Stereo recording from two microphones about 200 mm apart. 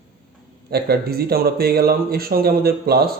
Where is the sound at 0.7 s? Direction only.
50° right (ahead or behind).